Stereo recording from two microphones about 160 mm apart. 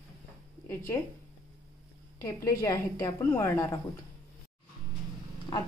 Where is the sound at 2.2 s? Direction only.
20° left (ahead or behind).